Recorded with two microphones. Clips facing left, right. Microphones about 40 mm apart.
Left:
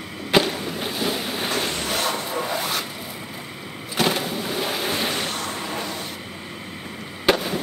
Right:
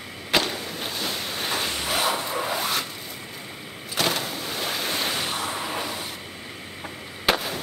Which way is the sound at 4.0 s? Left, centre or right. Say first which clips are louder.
Left 3 dB; centre.